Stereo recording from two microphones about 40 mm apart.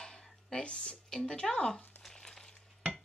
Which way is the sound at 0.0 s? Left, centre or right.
Centre.